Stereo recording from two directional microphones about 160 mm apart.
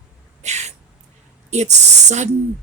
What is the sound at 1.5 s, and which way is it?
Speech, 45° right (ahead or behind).